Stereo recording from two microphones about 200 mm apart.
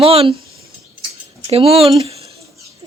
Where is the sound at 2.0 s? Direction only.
30° right (ahead or behind).